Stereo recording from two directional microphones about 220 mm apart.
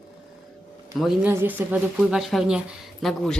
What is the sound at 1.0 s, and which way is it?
A woman's voice, 5° right (ahead or behind).